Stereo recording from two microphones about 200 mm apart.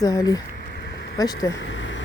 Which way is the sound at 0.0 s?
15° left (ahead or behind).